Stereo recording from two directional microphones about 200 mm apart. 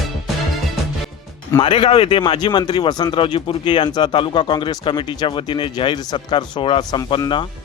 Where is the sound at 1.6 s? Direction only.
25° left (ahead or behind).